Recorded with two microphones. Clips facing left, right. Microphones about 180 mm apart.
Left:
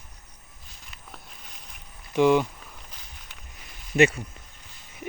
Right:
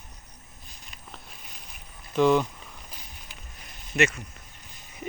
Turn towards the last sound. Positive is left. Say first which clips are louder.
# left 5 dB
turn(degrees=30)  # may be behind; listen again after turning